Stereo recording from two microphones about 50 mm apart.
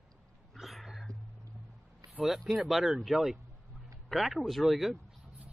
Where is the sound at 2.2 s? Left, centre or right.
Centre.